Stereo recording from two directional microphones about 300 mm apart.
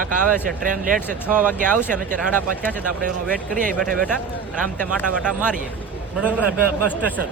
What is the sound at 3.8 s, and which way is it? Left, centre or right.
Speech, centre.